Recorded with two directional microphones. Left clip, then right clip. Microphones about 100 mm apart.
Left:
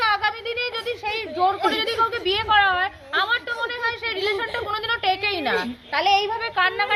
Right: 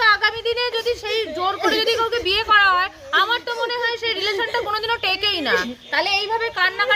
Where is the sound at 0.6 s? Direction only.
25° right (ahead or behind).